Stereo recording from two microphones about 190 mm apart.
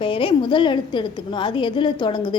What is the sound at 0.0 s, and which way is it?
A woman's voice, 25° left (ahead or behind).